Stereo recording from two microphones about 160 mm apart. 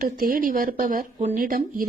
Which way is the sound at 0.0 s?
60° right (ahead or behind).